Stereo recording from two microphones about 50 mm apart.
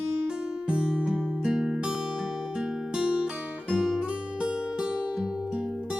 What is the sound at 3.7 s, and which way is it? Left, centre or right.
Music, centre.